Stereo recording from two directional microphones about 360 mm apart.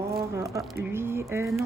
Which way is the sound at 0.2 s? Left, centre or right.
Centre.